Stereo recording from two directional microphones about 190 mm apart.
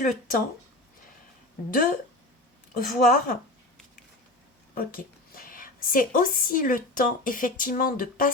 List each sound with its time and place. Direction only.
0.0 s a woman's voice: 45° left (ahead or behind)
2.7 s a woman's voice: 45° left (ahead or behind)
4.7 s a woman's voice: 50° left (ahead or behind)